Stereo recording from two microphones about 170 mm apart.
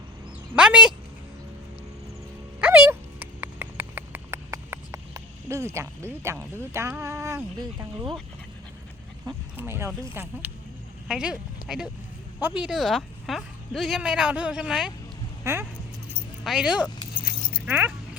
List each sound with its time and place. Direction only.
0.5 s speech: 5° right (ahead or behind)
2.6 s a sound: 10° right (ahead or behind)
9.2 s speech: 15° right (ahead or behind)
11.6 s a sound: 60° left (ahead or behind)
12.4 s speech: 10° right (ahead or behind)
16.4 s speech: 5° right (ahead or behind)
17.7 s music: 10° right (ahead or behind)